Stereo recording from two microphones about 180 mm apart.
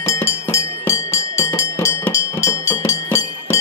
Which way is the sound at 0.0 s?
15° left (ahead or behind).